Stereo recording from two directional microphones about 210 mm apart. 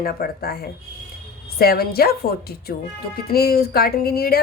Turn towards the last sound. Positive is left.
turn(degrees=45)  # may be behind; listen again after turning